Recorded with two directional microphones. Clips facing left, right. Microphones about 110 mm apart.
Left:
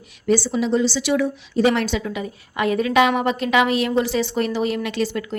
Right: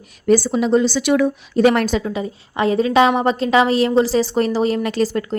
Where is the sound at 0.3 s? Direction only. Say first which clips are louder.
Right 4 dB; 45° right (ahead or behind).